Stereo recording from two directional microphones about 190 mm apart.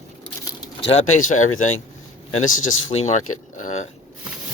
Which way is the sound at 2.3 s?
90° left.